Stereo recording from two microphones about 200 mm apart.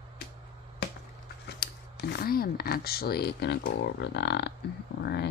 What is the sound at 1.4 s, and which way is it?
Speech, 55° left (ahead or behind).